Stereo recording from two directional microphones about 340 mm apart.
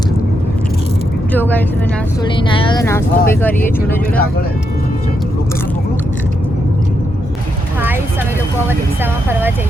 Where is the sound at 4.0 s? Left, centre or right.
Left.